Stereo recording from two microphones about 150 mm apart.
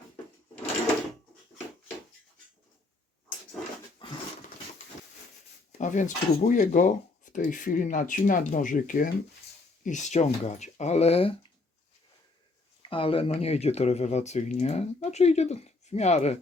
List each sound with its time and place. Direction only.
4.0 s a sound: 35° left (ahead or behind)
5.7 s speech: 55° left (ahead or behind); by 11.3 s 40° left (ahead or behind)
12.9 s speech: 40° left (ahead or behind)